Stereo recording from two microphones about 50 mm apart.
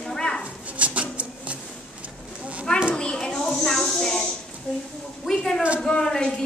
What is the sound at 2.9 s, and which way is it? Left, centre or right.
A child's voice, centre.